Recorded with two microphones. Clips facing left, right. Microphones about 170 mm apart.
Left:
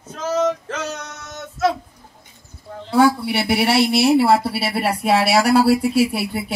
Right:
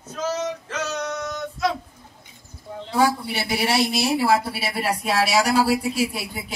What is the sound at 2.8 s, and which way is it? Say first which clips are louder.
Speech: left 5 dB; 65° left (ahead or behind).